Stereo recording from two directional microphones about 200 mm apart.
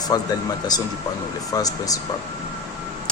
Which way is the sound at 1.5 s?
20° left (ahead or behind).